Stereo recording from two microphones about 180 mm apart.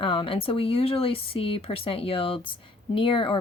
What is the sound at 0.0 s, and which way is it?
Speech, 30° left (ahead or behind).